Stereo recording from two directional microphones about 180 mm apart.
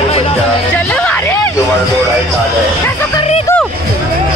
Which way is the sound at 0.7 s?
5° left (ahead or behind).